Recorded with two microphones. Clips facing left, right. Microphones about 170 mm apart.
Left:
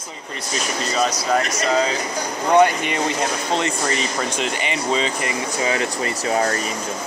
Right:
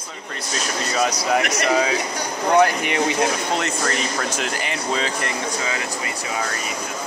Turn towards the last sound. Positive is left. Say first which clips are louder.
# left 6 dB
turn(degrees=40)  # may be behind; listen again after turning